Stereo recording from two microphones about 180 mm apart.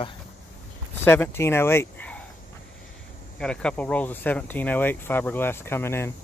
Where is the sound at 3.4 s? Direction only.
5° left (ahead or behind).